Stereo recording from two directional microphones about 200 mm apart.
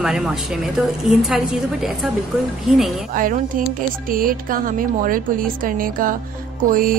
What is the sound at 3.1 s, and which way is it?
Speech, 40° right (ahead or behind).